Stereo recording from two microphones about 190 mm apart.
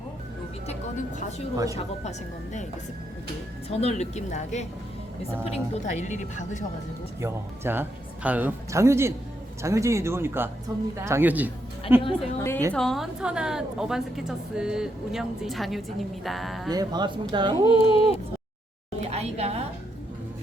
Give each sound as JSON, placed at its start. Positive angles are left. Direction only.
{"t": 0.7, "sound": "speech", "side_deg": 40}
{"t": 3.7, "sound": "speech", "side_deg": 35}
{"t": 7.2, "sound": "speech", "side_deg": -15}
{"t": 12.4, "sound": "a woman's voice", "side_deg": 15}
{"t": 12.7, "sound": "a woman's voice", "side_deg": 0}
{"t": 16.6, "sound": "speech", "side_deg": -20}
{"t": 17.7, "sound": "a sound", "side_deg": 30}
{"t": 18.9, "sound": "a sound", "side_deg": -35}